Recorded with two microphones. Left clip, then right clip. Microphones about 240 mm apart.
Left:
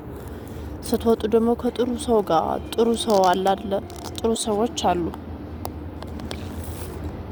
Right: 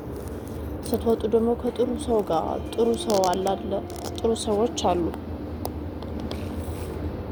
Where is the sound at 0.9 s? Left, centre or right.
Left.